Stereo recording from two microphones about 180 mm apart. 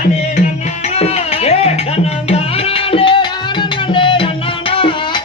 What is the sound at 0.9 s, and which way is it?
Music, 35° left (ahead or behind).